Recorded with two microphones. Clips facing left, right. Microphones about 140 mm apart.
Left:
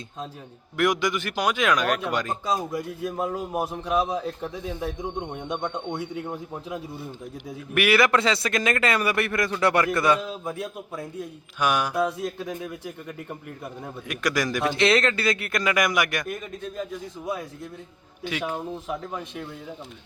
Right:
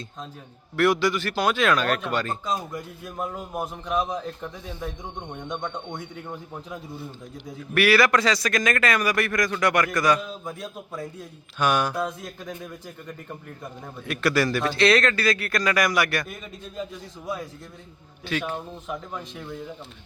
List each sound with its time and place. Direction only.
0.8 s speech: 15° left (ahead or behind)
10.6 s a man's voice: centre (ahead or behind)
14.1 s speech: 10° left (ahead or behind)
18.3 s speech: 10° left (ahead or behind)